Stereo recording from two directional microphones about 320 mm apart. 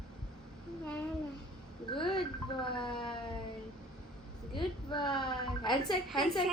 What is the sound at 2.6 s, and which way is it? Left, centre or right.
Wail, centre.